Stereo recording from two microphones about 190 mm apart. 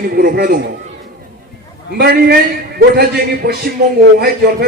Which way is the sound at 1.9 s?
60° right (ahead or behind).